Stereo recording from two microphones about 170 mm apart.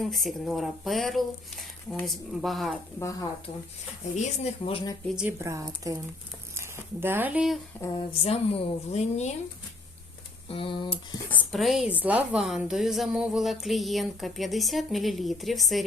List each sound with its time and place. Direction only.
0.0 s a woman's voice: centre (ahead or behind)
3.0 s speech: 20° left (ahead or behind)
4.1 s speech: 45° left (ahead or behind)
5.0 s a woman's voice: 5° right (ahead or behind)
5.4 s speech: 20° right (ahead or behind)
7.9 s speech: 35° left (ahead or behind)
10.5 s speech: 30° left (ahead or behind)
11.3 s a woman's voice: centre (ahead or behind)